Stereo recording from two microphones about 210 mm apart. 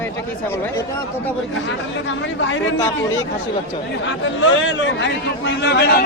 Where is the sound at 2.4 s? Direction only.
60° left (ahead or behind).